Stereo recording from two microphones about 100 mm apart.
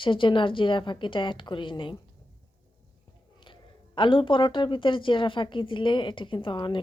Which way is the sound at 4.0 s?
55° left (ahead or behind).